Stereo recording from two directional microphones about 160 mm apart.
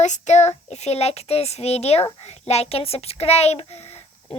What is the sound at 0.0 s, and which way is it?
A child's voice, 45° left (ahead or behind).